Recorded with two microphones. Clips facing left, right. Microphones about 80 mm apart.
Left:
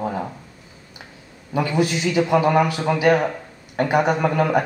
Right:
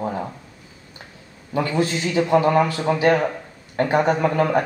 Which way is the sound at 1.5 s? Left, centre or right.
Centre.